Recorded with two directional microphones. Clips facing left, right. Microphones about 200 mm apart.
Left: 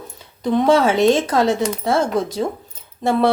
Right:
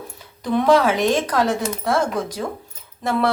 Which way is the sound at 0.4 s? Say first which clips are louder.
Left 1 dB; 25° left (ahead or behind).